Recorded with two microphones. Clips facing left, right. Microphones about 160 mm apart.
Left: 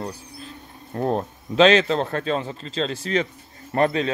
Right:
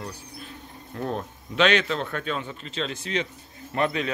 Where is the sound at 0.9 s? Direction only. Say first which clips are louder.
Left 7 dB; 35° left (ahead or behind).